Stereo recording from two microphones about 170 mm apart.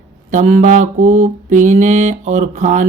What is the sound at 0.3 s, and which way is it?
Mantra, 45° right (ahead or behind).